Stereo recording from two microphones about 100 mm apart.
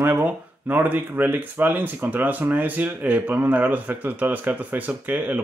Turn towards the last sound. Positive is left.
turn(degrees=-15)  # may be behind; listen again after turning